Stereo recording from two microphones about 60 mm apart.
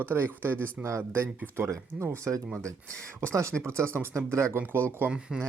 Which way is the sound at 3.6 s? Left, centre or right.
Right.